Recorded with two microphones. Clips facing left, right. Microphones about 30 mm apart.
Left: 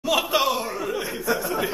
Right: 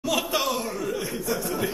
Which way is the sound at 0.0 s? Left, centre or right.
Centre.